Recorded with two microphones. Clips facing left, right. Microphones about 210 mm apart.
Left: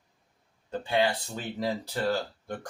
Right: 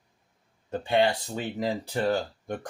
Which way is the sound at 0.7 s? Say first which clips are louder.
Right 3 dB; 25° right (ahead or behind).